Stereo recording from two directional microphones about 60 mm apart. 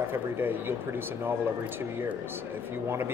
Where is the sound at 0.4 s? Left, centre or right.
Right.